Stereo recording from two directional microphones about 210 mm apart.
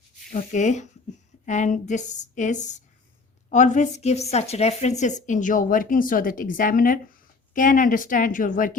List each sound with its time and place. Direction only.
0.3 s speech: 35° left (ahead or behind)